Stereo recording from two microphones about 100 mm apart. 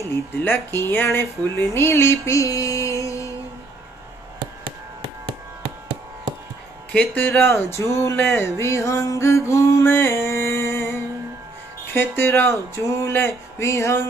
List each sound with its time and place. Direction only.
0.1 s speech: 20° left (ahead or behind)
6.9 s speech: 15° left (ahead or behind)
7.5 s speech: 30° left (ahead or behind)
11.9 s speech: 25° left (ahead or behind)